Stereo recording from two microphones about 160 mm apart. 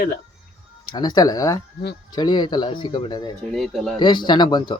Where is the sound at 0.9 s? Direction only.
25° left (ahead or behind).